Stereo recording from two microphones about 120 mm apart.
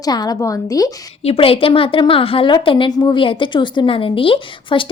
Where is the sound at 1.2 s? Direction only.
50° left (ahead or behind).